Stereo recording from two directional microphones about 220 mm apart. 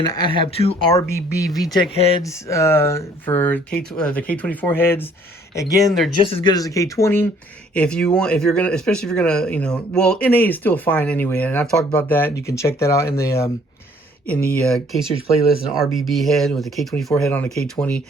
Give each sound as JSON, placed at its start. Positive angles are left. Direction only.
{"t": 0.0, "sound": "speech", "side_deg": 20}
{"t": 0.9, "sound": "speech", "side_deg": 15}
{"t": 1.7, "sound": "speech", "side_deg": 25}
{"t": 2.2, "sound": "speech", "side_deg": 15}
{"t": 14.6, "sound": "speech", "side_deg": 0}